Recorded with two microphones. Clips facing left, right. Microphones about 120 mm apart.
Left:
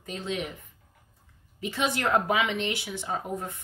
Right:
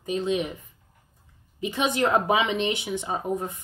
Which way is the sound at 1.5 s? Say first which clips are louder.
Right 4 dB; 20° right (ahead or behind).